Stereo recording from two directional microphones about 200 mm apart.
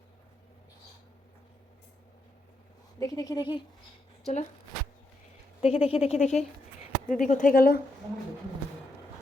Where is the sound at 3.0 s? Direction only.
15° left (ahead or behind).